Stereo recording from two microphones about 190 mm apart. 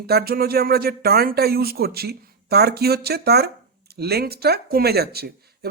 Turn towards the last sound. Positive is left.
turn(degrees=-55)  # may be behind; listen again after turning